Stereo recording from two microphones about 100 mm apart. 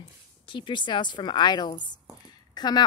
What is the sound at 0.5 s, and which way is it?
A woman's voice, 50° left (ahead or behind).